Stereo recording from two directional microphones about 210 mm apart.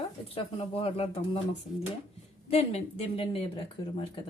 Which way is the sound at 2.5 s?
30° left (ahead or behind).